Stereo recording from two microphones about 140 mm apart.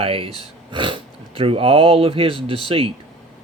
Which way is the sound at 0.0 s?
40° right (ahead or behind).